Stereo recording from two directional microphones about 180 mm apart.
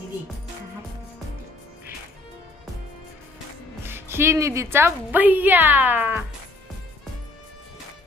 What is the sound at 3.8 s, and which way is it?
A woman's voice, 10° right (ahead or behind).